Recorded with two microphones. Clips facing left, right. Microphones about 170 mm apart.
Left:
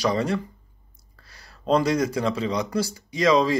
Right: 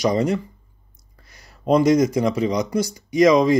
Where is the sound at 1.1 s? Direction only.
20° right (ahead or behind).